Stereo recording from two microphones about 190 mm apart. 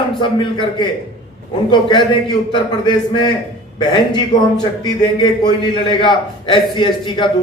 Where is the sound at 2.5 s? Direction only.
25° left (ahead or behind).